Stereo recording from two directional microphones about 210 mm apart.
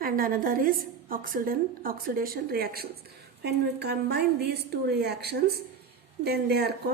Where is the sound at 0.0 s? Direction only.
45° right (ahead or behind).